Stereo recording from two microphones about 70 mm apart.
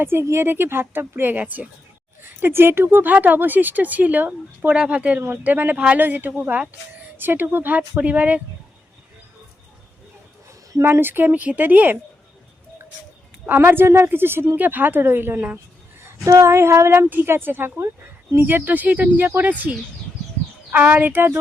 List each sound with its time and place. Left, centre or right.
0.0 s a woman's voice: right
10.8 s speech: right
13.4 s speech: right
13.7 s a woman's voice: right
16.2 s a woman's voice: right